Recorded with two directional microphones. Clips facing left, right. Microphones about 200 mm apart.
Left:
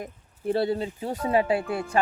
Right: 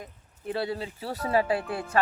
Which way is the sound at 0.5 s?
25° left (ahead or behind).